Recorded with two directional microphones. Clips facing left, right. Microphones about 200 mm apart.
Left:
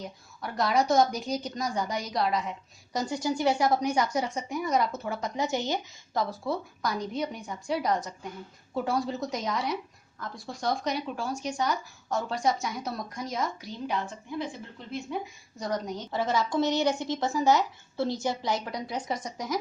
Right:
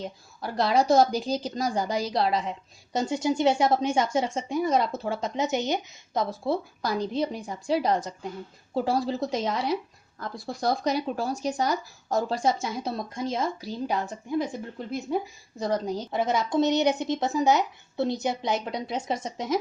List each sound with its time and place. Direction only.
0.0 s a woman's voice: 30° right (ahead or behind)
16.1 s a woman's voice: 20° right (ahead or behind)